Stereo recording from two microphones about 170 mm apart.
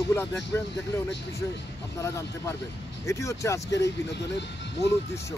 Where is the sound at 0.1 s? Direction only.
15° left (ahead or behind).